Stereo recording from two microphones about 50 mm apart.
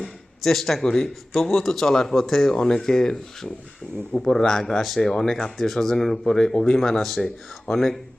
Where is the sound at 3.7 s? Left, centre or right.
Left.